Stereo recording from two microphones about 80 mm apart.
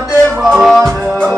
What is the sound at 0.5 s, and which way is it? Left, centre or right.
Music, centre.